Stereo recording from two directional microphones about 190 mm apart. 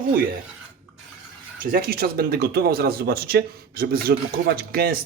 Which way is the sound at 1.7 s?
50° right (ahead or behind).